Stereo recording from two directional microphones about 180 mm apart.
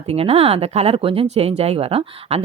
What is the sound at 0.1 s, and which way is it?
A woman's voice, 35° right (ahead or behind).